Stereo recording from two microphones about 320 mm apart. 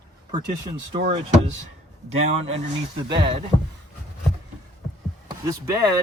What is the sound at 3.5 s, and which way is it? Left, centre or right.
Speech, centre.